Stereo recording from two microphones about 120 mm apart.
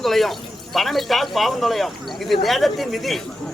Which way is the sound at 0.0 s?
Centre (ahead or behind).